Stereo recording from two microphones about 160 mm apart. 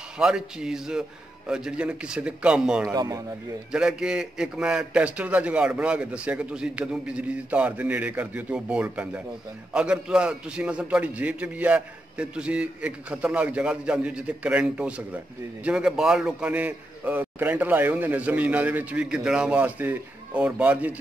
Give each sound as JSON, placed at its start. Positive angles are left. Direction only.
{"t": 0.2, "sound": "a man's voice", "side_deg": -5}
{"t": 2.9, "sound": "speech", "side_deg": -25}
{"t": 3.7, "sound": "a man's voice", "side_deg": -5}